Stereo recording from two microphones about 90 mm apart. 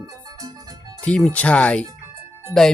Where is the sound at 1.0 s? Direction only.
15° left (ahead or behind).